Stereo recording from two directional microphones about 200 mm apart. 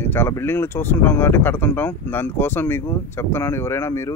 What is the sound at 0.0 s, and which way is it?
Speech, 10° left (ahead or behind).